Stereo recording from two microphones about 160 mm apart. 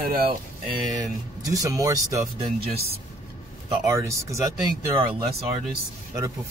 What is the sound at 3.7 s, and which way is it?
Speech, 20° right (ahead or behind).